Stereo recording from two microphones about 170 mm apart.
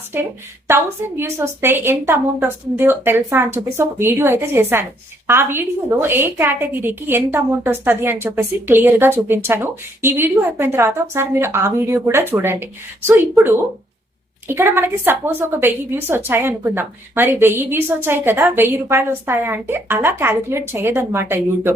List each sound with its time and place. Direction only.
0.1 s a woman's voice: 10° right (ahead or behind)